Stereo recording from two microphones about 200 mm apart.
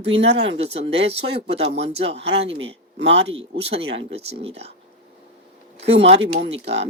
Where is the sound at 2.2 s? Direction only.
60° right (ahead or behind).